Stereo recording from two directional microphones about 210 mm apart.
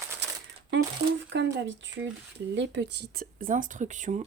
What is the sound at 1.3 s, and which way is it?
Speech, 60° right (ahead or behind).